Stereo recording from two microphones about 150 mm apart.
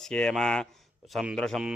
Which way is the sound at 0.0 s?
5° left (ahead or behind).